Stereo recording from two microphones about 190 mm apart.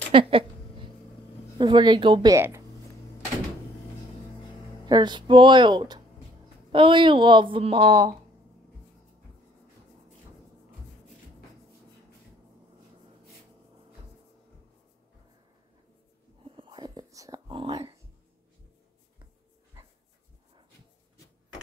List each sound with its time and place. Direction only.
0.1 s a sound: 25° right (ahead or behind)
1.6 s a woman's voice: 25° right (ahead or behind)
4.8 s a woman's voice: 25° right (ahead or behind)
16.4 s whispering: 25° right (ahead or behind)